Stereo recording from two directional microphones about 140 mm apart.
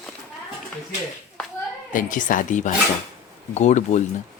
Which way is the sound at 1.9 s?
70° left (ahead or behind).